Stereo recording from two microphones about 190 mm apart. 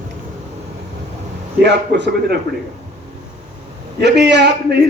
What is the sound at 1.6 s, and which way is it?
Speech, 65° right (ahead or behind).